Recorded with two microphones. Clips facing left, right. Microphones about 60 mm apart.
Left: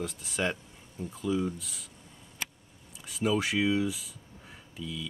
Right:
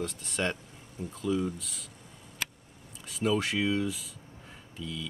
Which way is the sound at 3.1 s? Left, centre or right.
Centre.